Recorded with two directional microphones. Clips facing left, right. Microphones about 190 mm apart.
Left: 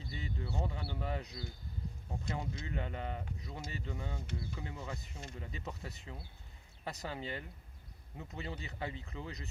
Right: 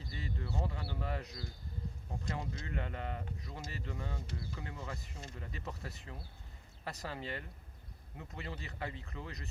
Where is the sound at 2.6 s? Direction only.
20° left (ahead or behind).